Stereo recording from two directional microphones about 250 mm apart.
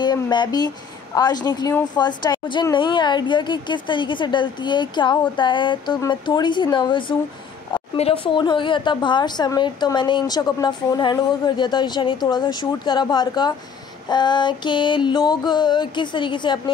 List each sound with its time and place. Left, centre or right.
0.0 s a woman's voice: centre